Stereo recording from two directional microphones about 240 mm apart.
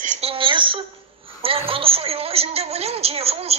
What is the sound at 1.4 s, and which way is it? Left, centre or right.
A woman's voice, right.